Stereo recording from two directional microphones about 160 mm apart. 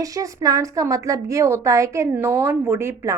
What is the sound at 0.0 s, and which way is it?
A woman's voice, 20° right (ahead or behind).